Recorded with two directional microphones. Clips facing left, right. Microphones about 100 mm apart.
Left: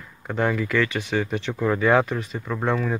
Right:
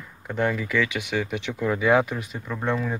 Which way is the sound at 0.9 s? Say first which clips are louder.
Left 2 dB; 30° left (ahead or behind).